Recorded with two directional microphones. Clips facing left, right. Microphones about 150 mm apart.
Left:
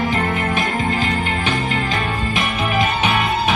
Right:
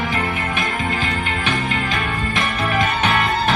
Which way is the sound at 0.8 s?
25° left (ahead or behind).